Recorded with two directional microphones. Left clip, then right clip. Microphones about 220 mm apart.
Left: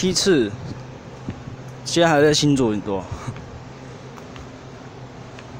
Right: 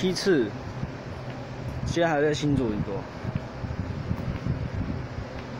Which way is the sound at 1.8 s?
25° left (ahead or behind).